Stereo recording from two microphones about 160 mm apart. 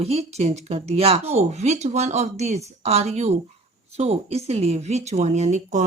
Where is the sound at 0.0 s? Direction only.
40° right (ahead or behind).